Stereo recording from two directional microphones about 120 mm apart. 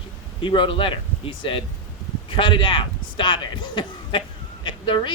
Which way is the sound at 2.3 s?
40° left (ahead or behind).